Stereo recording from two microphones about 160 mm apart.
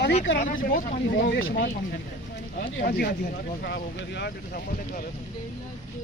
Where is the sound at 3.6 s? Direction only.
90° left; by 5.0 s 65° left (ahead or behind).